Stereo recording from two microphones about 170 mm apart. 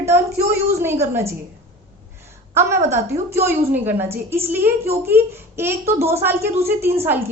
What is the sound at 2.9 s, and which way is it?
A woman's voice, 15° right (ahead or behind).